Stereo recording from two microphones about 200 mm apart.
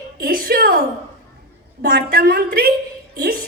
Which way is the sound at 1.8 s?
50° right (ahead or behind).